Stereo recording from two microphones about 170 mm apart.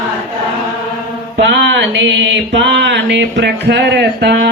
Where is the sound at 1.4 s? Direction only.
90° right.